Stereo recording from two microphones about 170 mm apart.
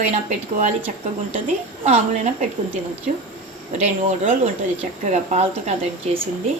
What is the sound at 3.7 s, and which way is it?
A woman's voice, 45° right (ahead or behind).